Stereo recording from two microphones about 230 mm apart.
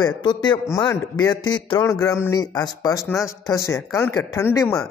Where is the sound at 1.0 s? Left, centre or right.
Left.